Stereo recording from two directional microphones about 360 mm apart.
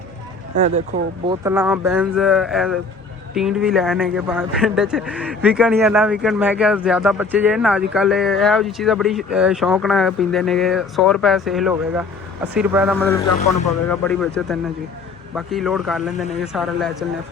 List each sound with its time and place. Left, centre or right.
0.6 s speech: centre
1.5 s speech: centre